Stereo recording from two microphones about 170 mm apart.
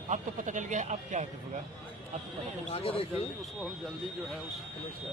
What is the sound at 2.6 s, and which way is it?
Speech, 35° left (ahead or behind).